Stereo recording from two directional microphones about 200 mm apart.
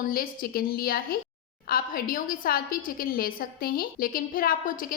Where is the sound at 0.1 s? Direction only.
45° left (ahead or behind).